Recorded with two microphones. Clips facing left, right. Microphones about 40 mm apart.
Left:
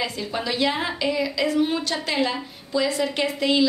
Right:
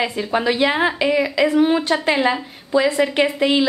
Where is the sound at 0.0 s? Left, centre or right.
Right.